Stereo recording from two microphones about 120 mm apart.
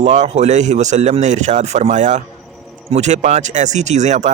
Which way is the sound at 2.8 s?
70° right (ahead or behind).